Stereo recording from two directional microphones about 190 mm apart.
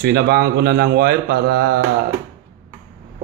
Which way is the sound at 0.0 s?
55° right (ahead or behind).